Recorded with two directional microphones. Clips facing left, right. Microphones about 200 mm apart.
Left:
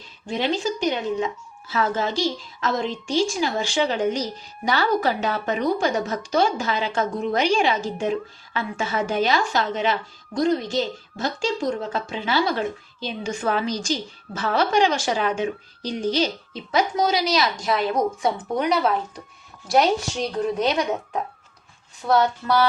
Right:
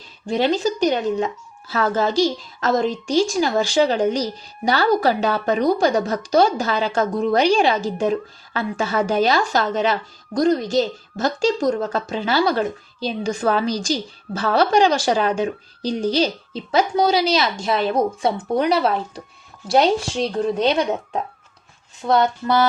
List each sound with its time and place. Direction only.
0.3 s a woman's voice: 40° right (ahead or behind); by 22.6 s 25° right (ahead or behind)